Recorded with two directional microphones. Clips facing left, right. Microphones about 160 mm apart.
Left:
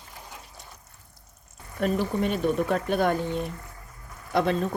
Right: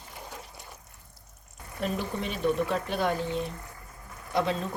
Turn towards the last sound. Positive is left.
turn(degrees=55)  # may be behind; listen again after turning